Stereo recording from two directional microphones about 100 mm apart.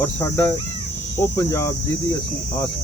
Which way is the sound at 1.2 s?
30° left (ahead or behind).